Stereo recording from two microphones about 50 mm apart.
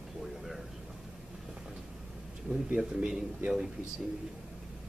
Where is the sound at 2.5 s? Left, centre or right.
Right.